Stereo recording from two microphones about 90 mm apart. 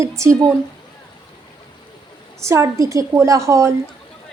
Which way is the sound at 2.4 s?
35° right (ahead or behind).